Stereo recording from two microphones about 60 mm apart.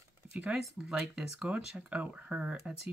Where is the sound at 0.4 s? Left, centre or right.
Centre.